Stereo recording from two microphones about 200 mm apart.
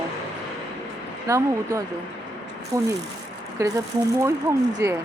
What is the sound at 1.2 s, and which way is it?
Speech, 15° right (ahead or behind).